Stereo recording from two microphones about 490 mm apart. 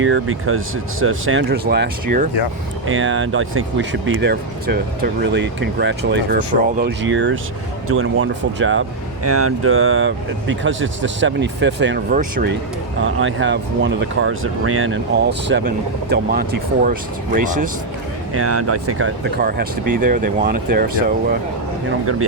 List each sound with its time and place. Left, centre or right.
0.0 s speech: right
18.3 s speech: right